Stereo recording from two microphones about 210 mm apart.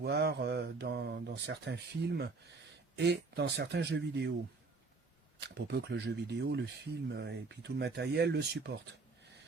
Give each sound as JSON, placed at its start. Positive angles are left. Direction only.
{"t": 0.0, "sound": "speech", "side_deg": -50}
{"t": 5.4, "sound": "speech", "side_deg": -55}